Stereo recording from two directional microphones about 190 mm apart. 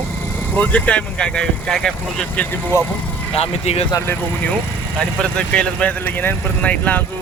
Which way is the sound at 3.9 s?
10° left (ahead or behind).